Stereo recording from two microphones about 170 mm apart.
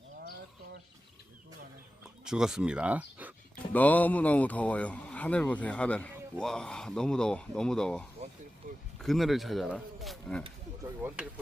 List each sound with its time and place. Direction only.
2.2 s speech: 5° right (ahead or behind)
3.7 s speech: 10° left (ahead or behind)
8.6 s a sound: 50° right (ahead or behind)
9.0 s speech: centre (ahead or behind)